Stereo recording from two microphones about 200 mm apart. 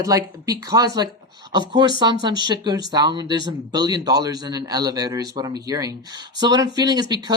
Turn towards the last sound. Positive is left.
turn(degrees=-20)  # may be behind; listen again after turning